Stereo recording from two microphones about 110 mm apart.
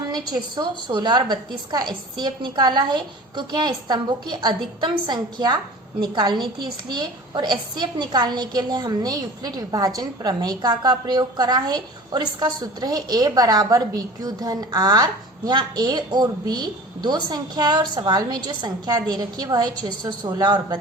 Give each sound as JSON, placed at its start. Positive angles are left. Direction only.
{"t": 0.1, "sound": "a woman's voice", "side_deg": -40}